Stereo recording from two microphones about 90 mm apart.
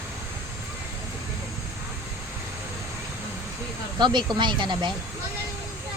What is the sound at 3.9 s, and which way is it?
Speech, 55° right (ahead or behind).